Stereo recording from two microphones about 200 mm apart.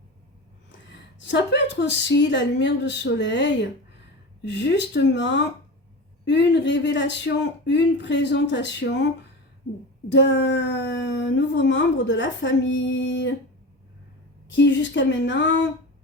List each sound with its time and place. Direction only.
0.7 s speech: 65° left (ahead or behind)
10.1 s speech: 60° left (ahead or behind)
14.5 s speech: 65° left (ahead or behind)